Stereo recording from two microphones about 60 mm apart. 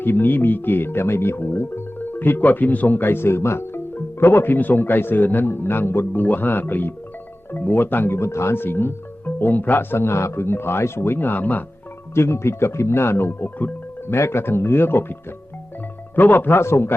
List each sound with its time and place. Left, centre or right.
0.0 s speech: left
2.0 s speech: left
12.1 s speech: left
16.1 s speech: left